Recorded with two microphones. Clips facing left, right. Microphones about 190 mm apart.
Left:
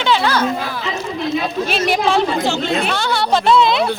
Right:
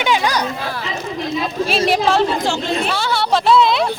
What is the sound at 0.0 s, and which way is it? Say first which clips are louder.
Speech: left 1 dB; 15° right (ahead or behind).